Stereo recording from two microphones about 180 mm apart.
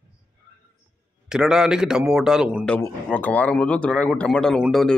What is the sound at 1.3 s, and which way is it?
A man's voice, 5° right (ahead or behind).